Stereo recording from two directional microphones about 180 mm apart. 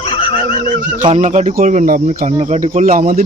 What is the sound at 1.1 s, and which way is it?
Speech, 40° right (ahead or behind).